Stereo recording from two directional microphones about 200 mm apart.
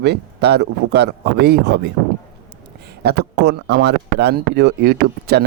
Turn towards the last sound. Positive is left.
turn(degrees=-55)  # may be behind; listen again after turning